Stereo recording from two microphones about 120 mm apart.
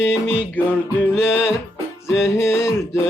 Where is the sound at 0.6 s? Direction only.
15° left (ahead or behind).